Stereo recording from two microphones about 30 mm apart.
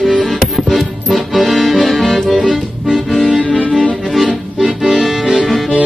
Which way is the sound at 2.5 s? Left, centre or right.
Centre.